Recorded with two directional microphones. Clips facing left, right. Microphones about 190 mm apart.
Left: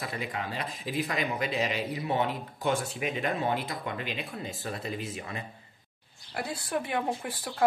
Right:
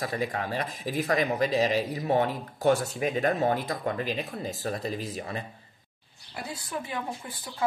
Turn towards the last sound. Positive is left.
turn(degrees=65)  # may be behind; listen again after turning